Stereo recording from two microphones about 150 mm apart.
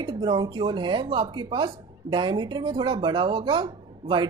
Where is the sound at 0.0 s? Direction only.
30° right (ahead or behind).